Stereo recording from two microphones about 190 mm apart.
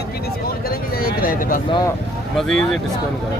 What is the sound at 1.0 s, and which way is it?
Speech, 45° left (ahead or behind).